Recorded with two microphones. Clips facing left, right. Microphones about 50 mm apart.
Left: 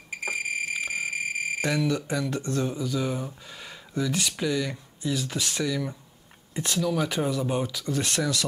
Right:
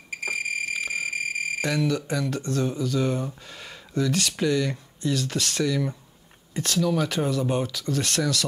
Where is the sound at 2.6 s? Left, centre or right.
Centre.